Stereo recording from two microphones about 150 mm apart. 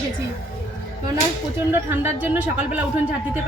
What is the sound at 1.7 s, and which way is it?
Speech, 15° right (ahead or behind).